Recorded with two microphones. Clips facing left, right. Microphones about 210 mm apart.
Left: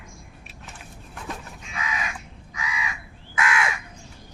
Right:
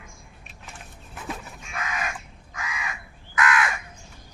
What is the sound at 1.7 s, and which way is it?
Crow, 50° right (ahead or behind).